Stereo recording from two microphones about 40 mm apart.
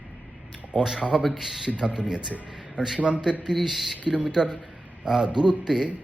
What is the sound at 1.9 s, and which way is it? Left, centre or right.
A man's voice, right.